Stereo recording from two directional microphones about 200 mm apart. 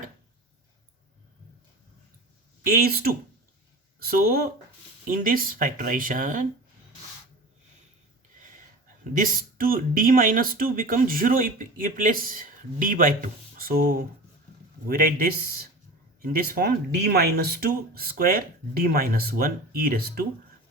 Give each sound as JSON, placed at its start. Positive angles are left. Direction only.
{"t": 2.6, "sound": "speech", "side_deg": -45}
{"t": 9.1, "sound": "speech", "side_deg": -45}